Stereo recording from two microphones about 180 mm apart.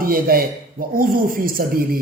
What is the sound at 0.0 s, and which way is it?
Speech, 55° right (ahead or behind).